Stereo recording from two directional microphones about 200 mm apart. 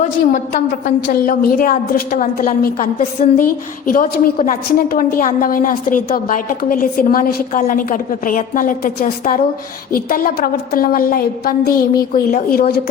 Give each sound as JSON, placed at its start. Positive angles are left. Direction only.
{"t": 0.3, "sound": "a woman's voice", "side_deg": 45}